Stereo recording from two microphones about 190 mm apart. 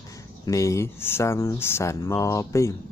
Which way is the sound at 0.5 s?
15° left (ahead or behind).